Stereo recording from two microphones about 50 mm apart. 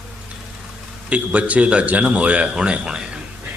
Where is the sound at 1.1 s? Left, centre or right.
Right.